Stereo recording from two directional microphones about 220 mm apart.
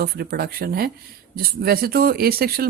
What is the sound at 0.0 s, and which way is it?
Speech, 45° right (ahead or behind).